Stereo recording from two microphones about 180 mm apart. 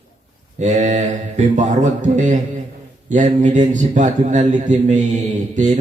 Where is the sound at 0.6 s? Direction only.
40° right (ahead or behind).